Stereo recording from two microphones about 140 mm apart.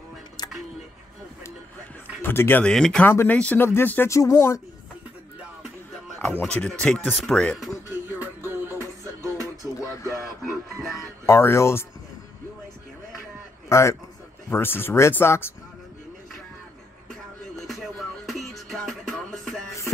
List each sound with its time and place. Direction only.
0.4 s a sound: 30° left (ahead or behind)
2.2 s speech: 15° left (ahead or behind)
6.3 s speech: 10° left (ahead or behind)
8.5 s music: 15° right (ahead or behind)
9.8 s a sound: 25° left (ahead or behind)
11.2 s speech: 20° left (ahead or behind)
13.7 s a man's voice: 20° left (ahead or behind)
17.6 s music: centre (ahead or behind)